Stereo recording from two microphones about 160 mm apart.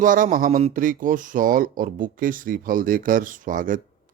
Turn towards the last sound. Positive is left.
turn(degrees=-60)  # may be behind; listen again after turning